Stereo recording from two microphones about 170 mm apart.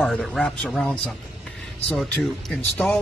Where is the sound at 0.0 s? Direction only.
Centre (ahead or behind).